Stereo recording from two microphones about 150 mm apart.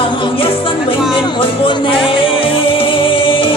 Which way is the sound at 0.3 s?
35° left (ahead or behind).